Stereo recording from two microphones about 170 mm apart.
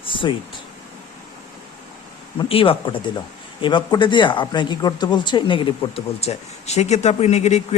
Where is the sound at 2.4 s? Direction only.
30° left (ahead or behind).